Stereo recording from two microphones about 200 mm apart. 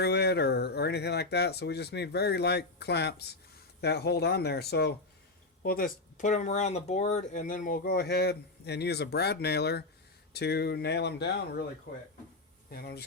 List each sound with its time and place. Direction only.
0.0 s speech: 55° left (ahead or behind)
12.7 s speech: 50° left (ahead or behind)